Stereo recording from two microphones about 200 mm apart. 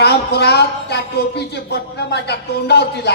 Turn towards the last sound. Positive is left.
turn(degrees=55)  # may be behind; listen again after turning